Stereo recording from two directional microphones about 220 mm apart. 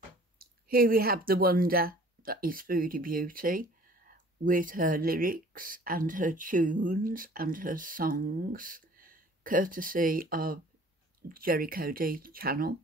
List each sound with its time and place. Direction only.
0.4 s speech: 40° right (ahead or behind)